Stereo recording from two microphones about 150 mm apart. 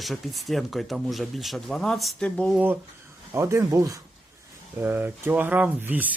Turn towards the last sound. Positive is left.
turn(degrees=-10)  # may be behind; listen again after turning